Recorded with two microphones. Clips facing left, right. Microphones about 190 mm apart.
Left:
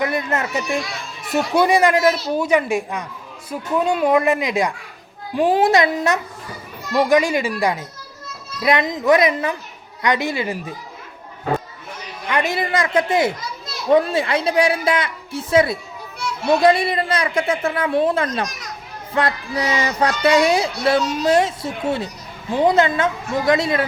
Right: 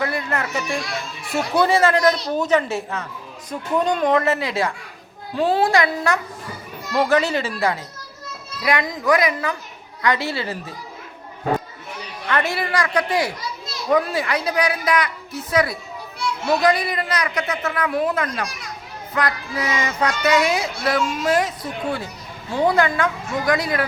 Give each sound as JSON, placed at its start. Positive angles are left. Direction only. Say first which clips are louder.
{"t": 0.0, "sound": "speech", "louder": "left 3 dB", "side_deg": 20}
{"t": 12.3, "sound": "speech", "louder": "left 2 dB", "side_deg": 15}